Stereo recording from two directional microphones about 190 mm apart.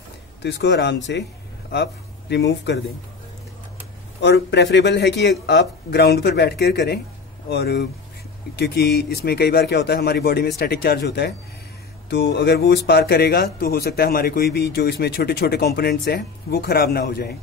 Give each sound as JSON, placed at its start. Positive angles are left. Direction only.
{"t": 0.4, "sound": "speech", "side_deg": 65}
{"t": 4.2, "sound": "speech", "side_deg": 65}